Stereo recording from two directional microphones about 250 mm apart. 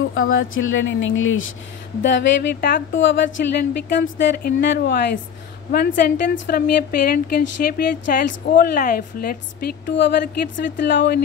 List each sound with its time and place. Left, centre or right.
0.1 s speech: left
2.6 s a woman's voice: left